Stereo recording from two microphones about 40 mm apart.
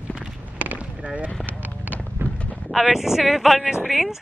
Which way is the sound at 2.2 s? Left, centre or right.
Right.